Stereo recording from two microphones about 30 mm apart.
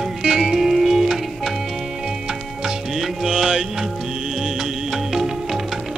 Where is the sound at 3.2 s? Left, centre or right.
Centre.